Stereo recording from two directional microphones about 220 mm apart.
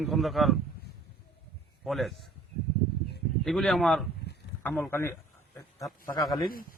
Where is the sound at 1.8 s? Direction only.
Centre (ahead or behind).